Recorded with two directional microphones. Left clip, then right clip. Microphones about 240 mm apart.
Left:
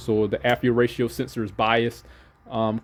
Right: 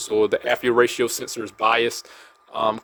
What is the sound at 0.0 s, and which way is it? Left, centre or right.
Speech, centre.